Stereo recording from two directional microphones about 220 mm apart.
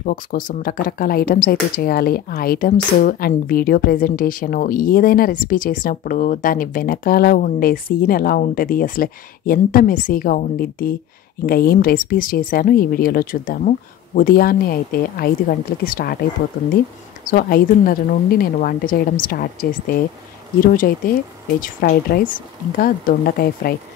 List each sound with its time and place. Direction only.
0.0 s speech: 40° left (ahead or behind)
17.2 s speech: 40° left (ahead or behind)